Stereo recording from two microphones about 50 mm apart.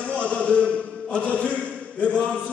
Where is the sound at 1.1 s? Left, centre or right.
Left.